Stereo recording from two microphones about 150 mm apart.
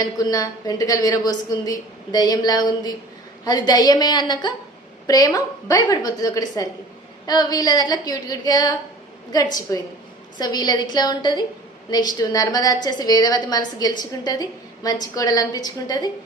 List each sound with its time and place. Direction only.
0.0 s a woman's voice: 25° left (ahead or behind)